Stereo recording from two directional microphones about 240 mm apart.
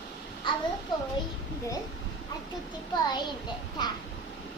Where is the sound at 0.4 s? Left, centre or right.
Centre.